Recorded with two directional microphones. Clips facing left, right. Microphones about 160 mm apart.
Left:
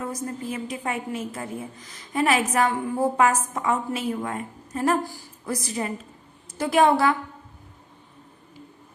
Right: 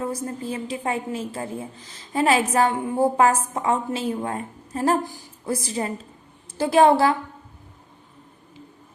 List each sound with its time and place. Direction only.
0.0 s a woman's voice: 30° right (ahead or behind)
5.0 s a woman's voice: 20° right (ahead or behind)